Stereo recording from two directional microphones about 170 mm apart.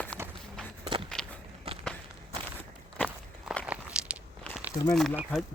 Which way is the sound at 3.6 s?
5° right (ahead or behind).